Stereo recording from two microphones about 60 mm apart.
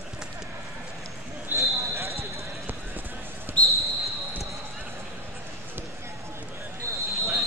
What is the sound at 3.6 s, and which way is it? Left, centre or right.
Basketball bounce, centre.